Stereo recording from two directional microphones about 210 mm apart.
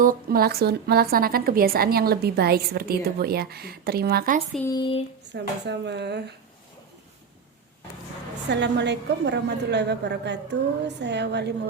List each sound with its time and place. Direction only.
0.0 s a woman's voice: 45° right (ahead or behind)
4.7 s a sound: 25° left (ahead or behind)
5.3 s a woman's voice: 55° right (ahead or behind)
8.4 s a woman's voice: 55° right (ahead or behind)